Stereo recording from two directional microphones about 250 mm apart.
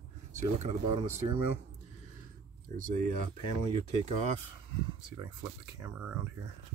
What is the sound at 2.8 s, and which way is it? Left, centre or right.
Speech, right.